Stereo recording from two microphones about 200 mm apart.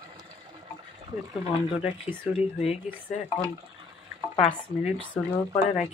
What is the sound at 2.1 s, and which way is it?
Speech, 30° left (ahead or behind).